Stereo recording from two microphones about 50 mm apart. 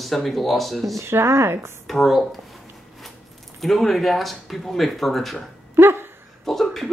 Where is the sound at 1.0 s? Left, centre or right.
Right.